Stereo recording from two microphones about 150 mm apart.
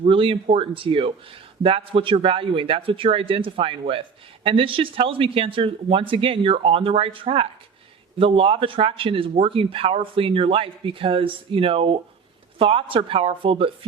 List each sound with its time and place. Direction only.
0.0 s a man's voice: 35° right (ahead or behind)